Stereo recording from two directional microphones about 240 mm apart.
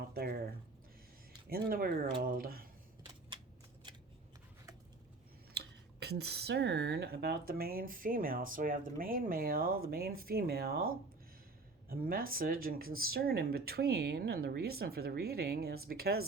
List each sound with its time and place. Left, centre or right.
0.1 s a sound: right
1.5 s speech: right
5.5 s speech: right
11.9 s speech: right